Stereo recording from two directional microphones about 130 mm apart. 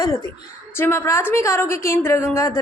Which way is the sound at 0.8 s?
15° left (ahead or behind).